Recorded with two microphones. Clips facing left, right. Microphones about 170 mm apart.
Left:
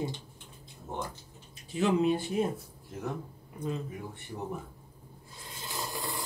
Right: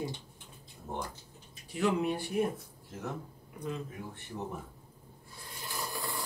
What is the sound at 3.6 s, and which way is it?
Speech, 25° left (ahead or behind).